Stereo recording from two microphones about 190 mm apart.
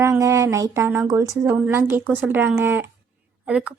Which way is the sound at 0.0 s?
15° right (ahead or behind).